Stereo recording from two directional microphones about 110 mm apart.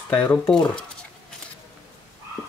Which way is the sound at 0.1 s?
15° left (ahead or behind).